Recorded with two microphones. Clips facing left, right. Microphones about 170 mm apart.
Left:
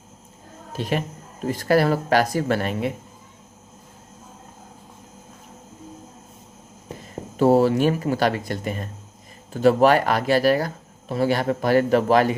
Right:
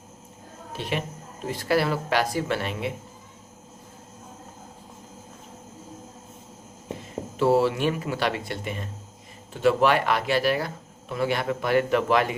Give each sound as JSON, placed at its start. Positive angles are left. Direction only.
{"t": 0.7, "sound": "speech", "side_deg": 45}
{"t": 7.3, "sound": "speech", "side_deg": 45}